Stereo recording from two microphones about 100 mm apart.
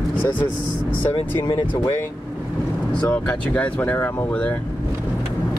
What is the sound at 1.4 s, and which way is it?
Speech, 55° left (ahead or behind).